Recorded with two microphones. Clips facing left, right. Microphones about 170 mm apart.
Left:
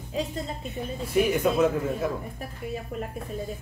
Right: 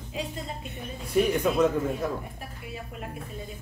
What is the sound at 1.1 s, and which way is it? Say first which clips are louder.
Speech: left 1 dB; 5° left (ahead or behind).